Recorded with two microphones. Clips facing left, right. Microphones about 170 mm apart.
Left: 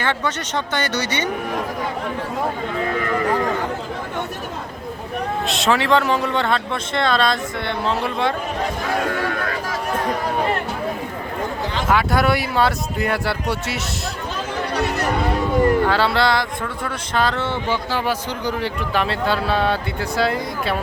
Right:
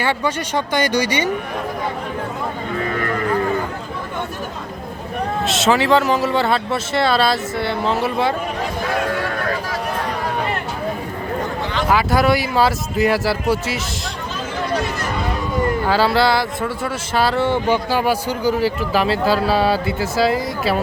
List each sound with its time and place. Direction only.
0.0 s speech: 10° right (ahead or behind)
5.5 s speech: centre (ahead or behind)
11.9 s speech: centre (ahead or behind)
14.7 s a sound: 65° left (ahead or behind)
15.8 s speech: 5° right (ahead or behind)